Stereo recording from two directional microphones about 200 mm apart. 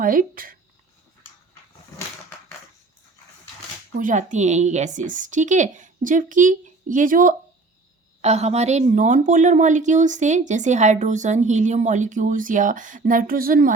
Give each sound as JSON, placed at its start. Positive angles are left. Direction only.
{"t": 0.0, "sound": "speech", "side_deg": -45}
{"t": 3.9, "sound": "a woman's voice", "side_deg": -40}